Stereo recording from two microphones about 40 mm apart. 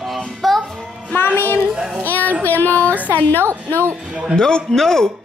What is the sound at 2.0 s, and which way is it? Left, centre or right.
Speech, left.